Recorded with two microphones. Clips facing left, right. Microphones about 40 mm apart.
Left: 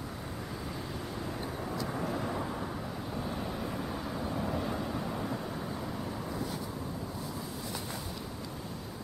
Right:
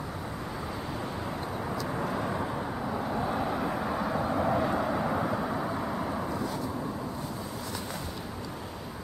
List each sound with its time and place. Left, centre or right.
3.1 s vehicle: right